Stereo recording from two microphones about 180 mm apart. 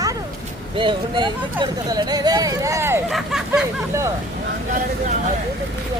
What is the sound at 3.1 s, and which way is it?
Speech, centre (ahead or behind).